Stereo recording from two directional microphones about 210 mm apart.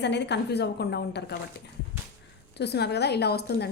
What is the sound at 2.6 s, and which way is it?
Speech, 50° left (ahead or behind).